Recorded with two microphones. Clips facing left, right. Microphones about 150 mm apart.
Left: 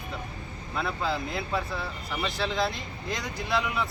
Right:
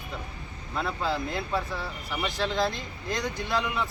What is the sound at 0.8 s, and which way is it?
Speech, centre (ahead or behind).